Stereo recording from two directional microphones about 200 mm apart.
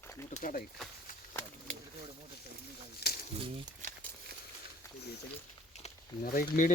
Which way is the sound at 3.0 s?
55° left (ahead or behind).